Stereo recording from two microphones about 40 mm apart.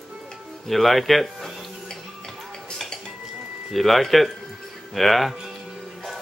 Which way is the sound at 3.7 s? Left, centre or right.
Centre.